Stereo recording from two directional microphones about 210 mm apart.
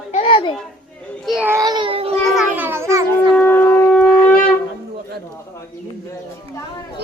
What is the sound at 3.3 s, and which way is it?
Shofar, 10° left (ahead or behind).